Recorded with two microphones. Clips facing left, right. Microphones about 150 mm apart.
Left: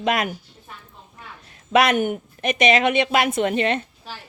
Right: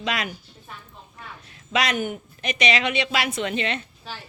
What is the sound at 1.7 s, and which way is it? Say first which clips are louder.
A woman's voice: left 7 dB; 55° left (ahead or behind).